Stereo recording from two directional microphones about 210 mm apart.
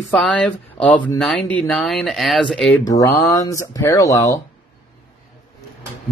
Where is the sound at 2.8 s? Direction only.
15° left (ahead or behind).